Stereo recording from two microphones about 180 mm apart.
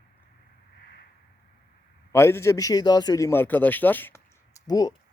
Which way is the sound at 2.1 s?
15° left (ahead or behind).